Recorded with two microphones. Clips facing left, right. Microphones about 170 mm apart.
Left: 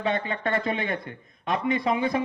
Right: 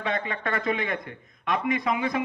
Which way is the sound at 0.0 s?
30° left (ahead or behind).